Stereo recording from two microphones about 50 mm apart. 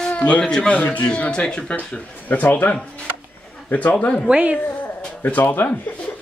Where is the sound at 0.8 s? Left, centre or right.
Left.